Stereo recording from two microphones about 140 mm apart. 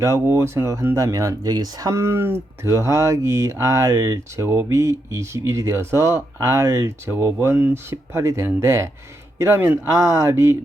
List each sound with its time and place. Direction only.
0.0 s speech: 20° right (ahead or behind)